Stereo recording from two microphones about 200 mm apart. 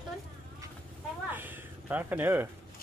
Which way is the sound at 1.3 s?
10° right (ahead or behind).